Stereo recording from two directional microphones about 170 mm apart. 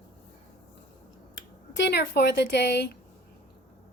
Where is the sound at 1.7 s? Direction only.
90° left.